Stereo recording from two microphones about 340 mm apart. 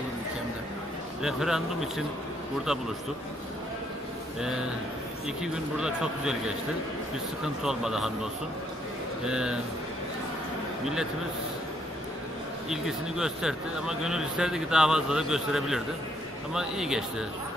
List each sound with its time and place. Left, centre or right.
1.2 s speech: centre
4.4 s speech: centre
9.2 s speech: centre
12.6 s speech: centre